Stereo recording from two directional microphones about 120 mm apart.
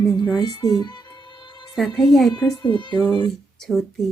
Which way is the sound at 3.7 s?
5° left (ahead or behind).